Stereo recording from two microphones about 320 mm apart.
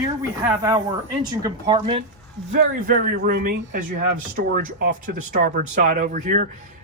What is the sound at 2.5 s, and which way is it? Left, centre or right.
A man's voice, right.